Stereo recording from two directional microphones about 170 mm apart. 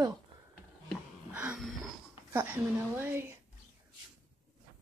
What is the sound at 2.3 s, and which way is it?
Speech, 15° right (ahead or behind).